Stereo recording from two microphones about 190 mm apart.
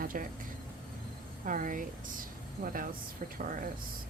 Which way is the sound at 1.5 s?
45° right (ahead or behind).